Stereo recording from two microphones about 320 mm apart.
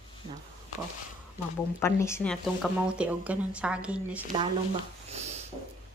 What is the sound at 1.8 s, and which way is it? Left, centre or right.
Speech, centre.